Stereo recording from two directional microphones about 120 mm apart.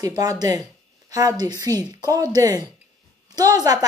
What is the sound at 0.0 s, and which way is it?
A woman's voice, 30° right (ahead or behind).